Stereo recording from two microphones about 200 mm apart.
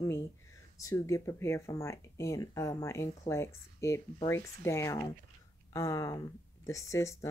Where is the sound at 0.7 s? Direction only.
15° left (ahead or behind).